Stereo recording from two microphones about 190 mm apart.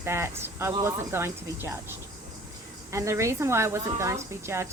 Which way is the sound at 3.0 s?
15° right (ahead or behind).